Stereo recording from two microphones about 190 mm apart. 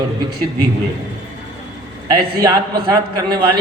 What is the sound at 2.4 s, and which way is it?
Speech, 20° right (ahead or behind).